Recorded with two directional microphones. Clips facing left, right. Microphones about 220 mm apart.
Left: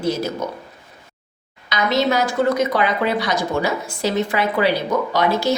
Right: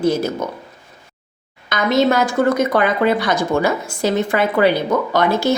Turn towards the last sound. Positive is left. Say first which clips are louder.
# right 2 dB
turn(degrees=-50)  # may be behind; listen again after turning